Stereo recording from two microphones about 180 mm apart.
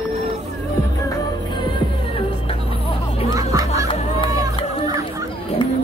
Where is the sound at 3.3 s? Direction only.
20° right (ahead or behind).